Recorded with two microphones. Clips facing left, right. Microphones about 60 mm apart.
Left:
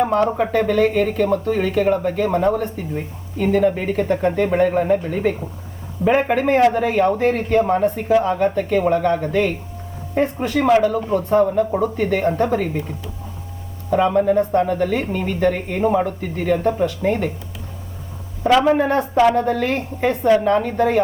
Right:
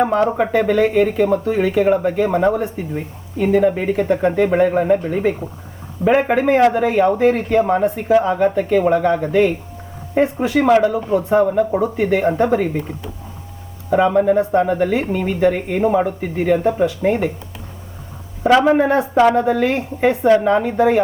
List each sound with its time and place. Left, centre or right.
0.0 s speech: right
13.9 s speech: centre
18.4 s speech: centre